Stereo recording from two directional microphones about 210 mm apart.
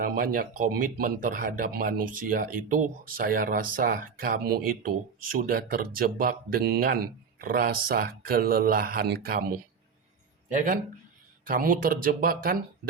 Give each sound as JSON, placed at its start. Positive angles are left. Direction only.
{"t": 0.0, "sound": "speech", "side_deg": -45}
{"t": 11.4, "sound": "speech", "side_deg": -40}